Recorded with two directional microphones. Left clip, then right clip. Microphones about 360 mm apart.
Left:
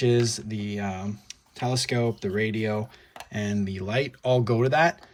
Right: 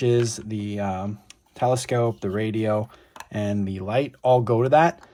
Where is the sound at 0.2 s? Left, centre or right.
Centre.